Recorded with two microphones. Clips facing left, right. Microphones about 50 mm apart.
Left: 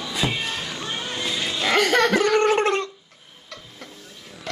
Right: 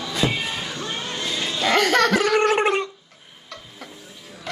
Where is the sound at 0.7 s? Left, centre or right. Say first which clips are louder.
Even; centre.